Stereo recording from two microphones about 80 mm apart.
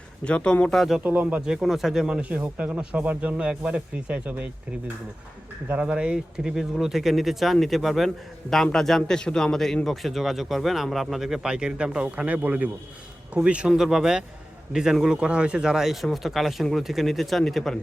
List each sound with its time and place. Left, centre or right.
0.3 s speech: centre
0.8 s speech: centre
1.0 s speech: right
1.5 s speech: centre
5.8 s speech: centre